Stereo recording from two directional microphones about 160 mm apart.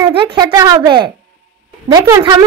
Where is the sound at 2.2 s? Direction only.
25° right (ahead or behind).